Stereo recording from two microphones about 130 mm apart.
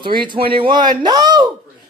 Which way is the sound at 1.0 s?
30° right (ahead or behind).